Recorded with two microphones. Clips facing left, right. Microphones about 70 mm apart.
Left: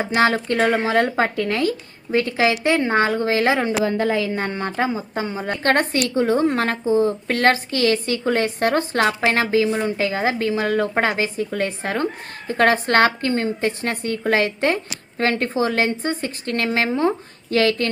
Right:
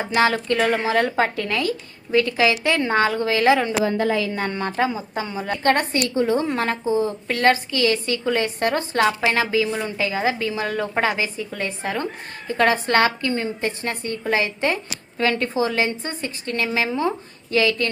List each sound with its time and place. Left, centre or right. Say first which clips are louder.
0.0 s a woman's voice: left 1 dB; left
2.7 s a woman's voice: left 1 dB; left
3.2 s a woman's voice: right 1 dB; left
5.6 s a woman's voice: left 1 dB; left
9.6 s a woman's voice: left 3 dB; left
13.7 s a woman's voice: left 3 dB; left
15.2 s a woman's voice: left 1 dB; left